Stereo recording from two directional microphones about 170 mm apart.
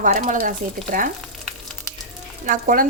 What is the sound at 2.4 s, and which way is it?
Speech, 55° right (ahead or behind).